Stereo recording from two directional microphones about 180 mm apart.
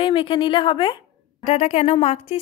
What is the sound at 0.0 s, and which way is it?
A woman's voice, 30° left (ahead or behind).